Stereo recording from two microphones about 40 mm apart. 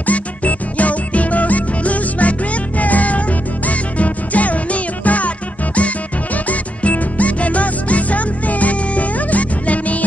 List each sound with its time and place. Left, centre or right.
0.0 s music: left